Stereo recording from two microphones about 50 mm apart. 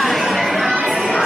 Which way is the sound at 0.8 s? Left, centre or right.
Centre.